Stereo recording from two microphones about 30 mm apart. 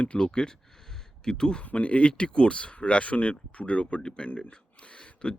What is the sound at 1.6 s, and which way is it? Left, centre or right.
Speech, left.